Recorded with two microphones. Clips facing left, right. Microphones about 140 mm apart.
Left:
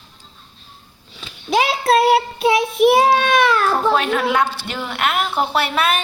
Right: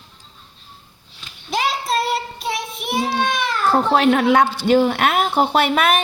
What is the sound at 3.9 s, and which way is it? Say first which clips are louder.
A woman's voice: right 3 dB; 20° right (ahead or behind).